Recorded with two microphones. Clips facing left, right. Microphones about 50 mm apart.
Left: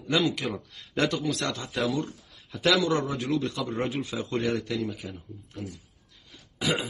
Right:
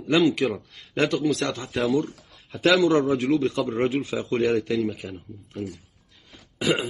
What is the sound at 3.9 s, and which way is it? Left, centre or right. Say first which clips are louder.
Speech: right 5 dB; right.